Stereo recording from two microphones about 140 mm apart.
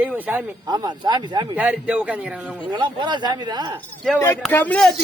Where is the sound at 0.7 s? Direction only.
30° right (ahead or behind).